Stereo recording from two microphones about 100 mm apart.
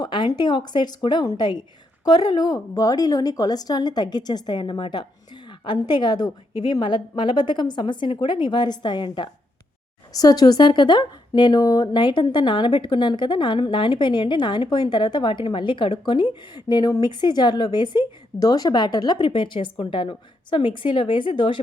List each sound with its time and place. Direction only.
0.0 s speech: 45° left (ahead or behind)
10.1 s speech: 40° left (ahead or behind); by 21.6 s 55° left (ahead or behind)